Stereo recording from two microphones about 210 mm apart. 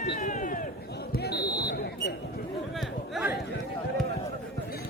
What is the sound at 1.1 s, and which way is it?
Basketball bounce, 50° left (ahead or behind).